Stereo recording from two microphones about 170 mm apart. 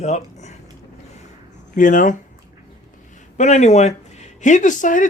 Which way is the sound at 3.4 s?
45° left (ahead or behind).